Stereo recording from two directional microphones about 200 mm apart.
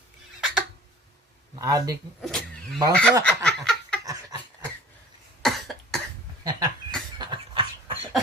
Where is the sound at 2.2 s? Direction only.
Centre (ahead or behind).